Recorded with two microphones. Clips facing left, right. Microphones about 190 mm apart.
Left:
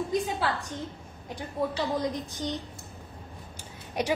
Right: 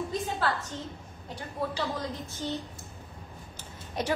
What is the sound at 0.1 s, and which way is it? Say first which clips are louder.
Speech: left 2 dB; 15° left (ahead or behind).